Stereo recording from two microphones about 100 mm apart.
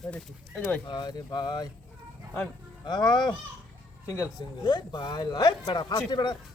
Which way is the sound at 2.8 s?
45° left (ahead or behind).